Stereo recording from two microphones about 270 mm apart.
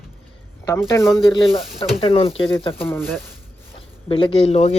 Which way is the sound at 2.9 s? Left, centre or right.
Centre.